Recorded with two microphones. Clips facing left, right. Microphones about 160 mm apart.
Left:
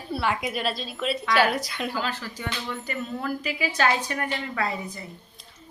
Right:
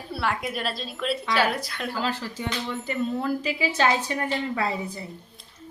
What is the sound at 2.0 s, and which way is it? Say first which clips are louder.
Speech: right 2 dB; 30° right (ahead or behind).